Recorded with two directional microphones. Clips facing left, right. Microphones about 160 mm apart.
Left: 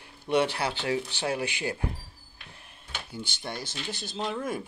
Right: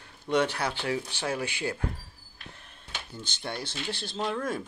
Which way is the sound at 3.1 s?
5° left (ahead or behind).